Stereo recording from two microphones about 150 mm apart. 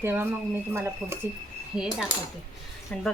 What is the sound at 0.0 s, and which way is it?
Speech, 15° right (ahead or behind).